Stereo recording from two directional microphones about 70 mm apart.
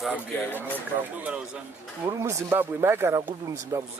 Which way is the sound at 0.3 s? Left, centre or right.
Left.